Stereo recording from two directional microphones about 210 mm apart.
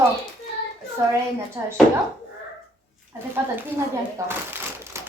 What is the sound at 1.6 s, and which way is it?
Speech, 15° right (ahead or behind).